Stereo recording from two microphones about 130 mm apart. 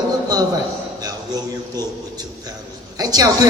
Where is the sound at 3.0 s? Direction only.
30° right (ahead or behind).